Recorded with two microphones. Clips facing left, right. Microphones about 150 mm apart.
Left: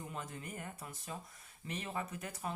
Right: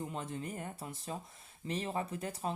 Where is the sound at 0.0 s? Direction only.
30° right (ahead or behind).